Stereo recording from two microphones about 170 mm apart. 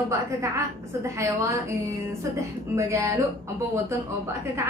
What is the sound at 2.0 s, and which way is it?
A woman's voice, 15° right (ahead or behind).